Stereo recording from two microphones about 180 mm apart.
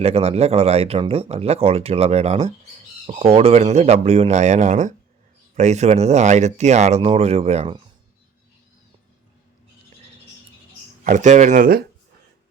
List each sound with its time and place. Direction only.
0.0 s speech: 35° right (ahead or behind)
11.0 s speech: 45° right (ahead or behind)